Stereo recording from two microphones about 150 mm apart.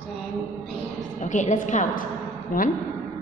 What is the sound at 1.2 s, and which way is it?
Speech, 55° left (ahead or behind).